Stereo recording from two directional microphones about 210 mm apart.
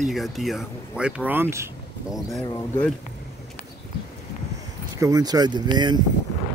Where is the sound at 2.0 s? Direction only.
Centre (ahead or behind).